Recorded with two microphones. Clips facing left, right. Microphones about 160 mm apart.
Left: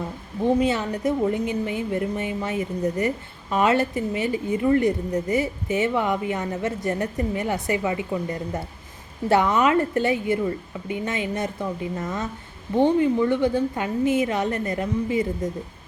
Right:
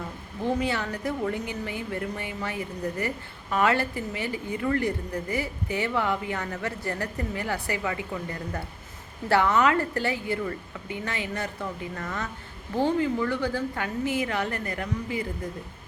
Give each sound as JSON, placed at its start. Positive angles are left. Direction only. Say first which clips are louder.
{"t": 0.4, "sound": "speech", "louder": "left 6 dB", "side_deg": 20}